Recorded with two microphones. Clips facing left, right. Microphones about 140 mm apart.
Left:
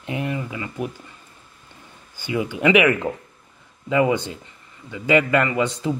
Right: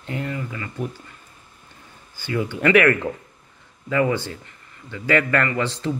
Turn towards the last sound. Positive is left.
turn(degrees=15)  # may be behind; listen again after turning